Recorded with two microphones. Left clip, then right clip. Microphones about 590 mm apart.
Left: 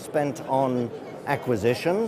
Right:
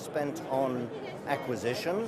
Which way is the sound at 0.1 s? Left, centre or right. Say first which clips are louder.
Left 7 dB; left.